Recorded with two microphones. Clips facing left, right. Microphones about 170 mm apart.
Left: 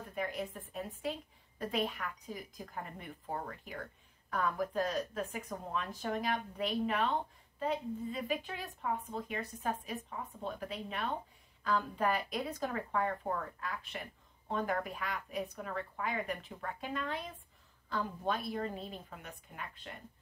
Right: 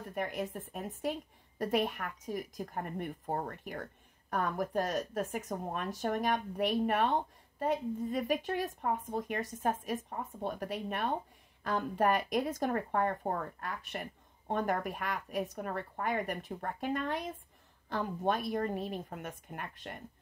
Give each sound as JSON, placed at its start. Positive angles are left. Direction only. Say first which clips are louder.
{"t": 0.1, "sound": "a woman's voice", "louder": "right 2 dB", "side_deg": -50}